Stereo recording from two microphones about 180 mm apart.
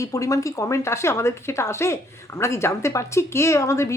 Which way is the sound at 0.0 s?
20° left (ahead or behind).